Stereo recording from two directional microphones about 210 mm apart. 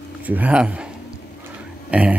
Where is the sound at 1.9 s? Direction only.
5° right (ahead or behind).